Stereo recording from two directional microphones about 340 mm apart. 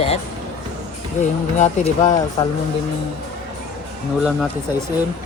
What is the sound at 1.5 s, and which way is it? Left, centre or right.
Speech, left.